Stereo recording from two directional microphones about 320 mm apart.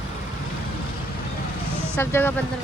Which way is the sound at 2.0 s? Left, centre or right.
Centre.